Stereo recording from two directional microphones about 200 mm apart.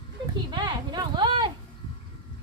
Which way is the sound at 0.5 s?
20° right (ahead or behind).